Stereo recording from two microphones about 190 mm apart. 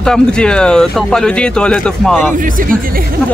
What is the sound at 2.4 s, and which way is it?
Speech, 45° right (ahead or behind).